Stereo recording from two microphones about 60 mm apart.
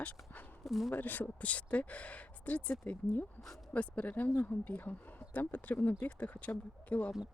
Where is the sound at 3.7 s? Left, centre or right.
Left.